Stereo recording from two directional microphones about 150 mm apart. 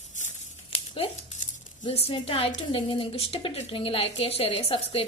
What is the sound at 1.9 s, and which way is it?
A woman's voice, 40° left (ahead or behind).